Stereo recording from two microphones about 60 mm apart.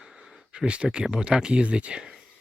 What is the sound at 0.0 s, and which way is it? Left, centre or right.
Speech, centre.